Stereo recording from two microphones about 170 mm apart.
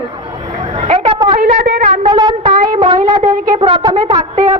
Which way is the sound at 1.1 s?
30° right (ahead or behind).